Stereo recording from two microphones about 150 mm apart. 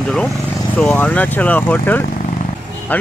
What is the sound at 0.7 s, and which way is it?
Speech, 10° left (ahead or behind).